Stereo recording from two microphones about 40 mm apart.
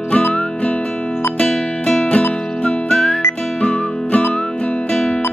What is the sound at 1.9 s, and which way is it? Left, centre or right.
Music, left.